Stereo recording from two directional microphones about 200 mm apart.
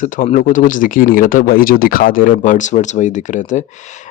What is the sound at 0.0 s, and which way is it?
Speech, 40° left (ahead or behind).